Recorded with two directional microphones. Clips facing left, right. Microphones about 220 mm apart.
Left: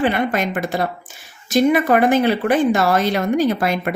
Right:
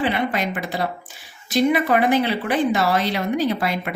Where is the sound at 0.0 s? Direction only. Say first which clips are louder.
Left 3 dB; 50° left (ahead or behind).